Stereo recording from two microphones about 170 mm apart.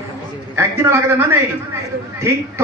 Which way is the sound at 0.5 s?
15° right (ahead or behind).